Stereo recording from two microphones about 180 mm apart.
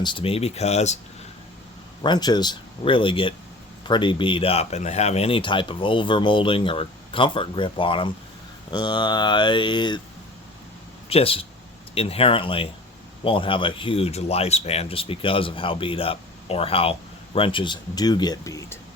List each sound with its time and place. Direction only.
0.0 s speech: 30° left (ahead or behind)
2.0 s speech: 25° left (ahead or behind)
11.1 s speech: 30° left (ahead or behind)